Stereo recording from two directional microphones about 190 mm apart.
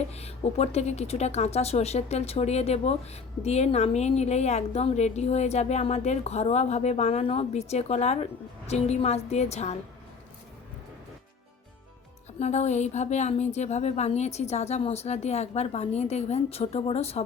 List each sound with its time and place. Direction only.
0.1 s a woman's voice: 35° left (ahead or behind)
12.4 s a woman's voice: 35° left (ahead or behind)